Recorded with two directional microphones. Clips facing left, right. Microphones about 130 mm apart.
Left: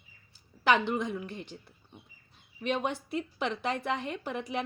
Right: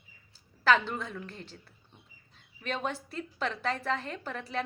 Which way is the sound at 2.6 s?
15° left (ahead or behind).